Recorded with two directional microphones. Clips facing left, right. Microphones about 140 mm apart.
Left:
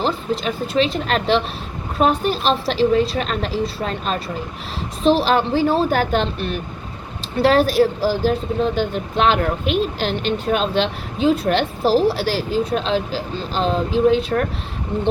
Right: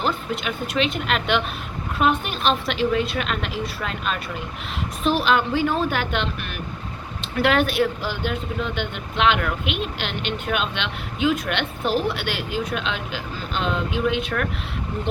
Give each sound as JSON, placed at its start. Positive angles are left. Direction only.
{"t": 0.0, "sound": "speech", "side_deg": 30}